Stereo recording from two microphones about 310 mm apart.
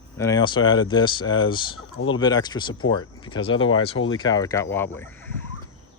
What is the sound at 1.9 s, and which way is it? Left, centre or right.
Speech, left.